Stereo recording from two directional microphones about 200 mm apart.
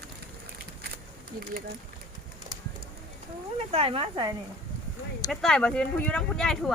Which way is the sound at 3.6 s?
30° right (ahead or behind).